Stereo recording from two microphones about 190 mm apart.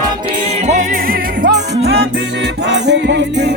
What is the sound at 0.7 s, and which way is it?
Music, 40° right (ahead or behind).